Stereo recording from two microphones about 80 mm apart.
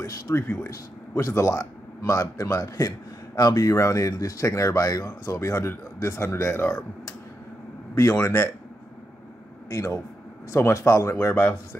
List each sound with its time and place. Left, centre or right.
0.0 s speech: left
8.2 s speech: left
9.7 s speech: left